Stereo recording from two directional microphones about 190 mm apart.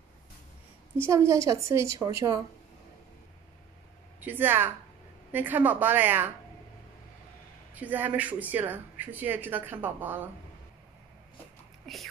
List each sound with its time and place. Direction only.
0.9 s speech: 15° right (ahead or behind)
4.2 s speech: 10° right (ahead or behind)
7.8 s speech: 10° right (ahead or behind)
11.9 s speech: centre (ahead or behind)